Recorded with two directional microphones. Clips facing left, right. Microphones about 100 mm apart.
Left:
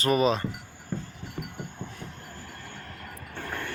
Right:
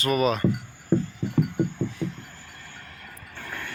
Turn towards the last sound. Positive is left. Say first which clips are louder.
# left 2 dB
turn(degrees=40)  # may be behind; listen again after turning